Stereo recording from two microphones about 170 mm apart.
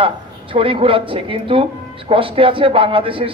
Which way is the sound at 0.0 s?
30° right (ahead or behind).